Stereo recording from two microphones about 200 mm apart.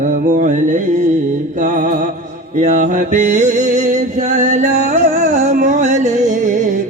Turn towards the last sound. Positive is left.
turn(degrees=-40)  # may be behind; listen again after turning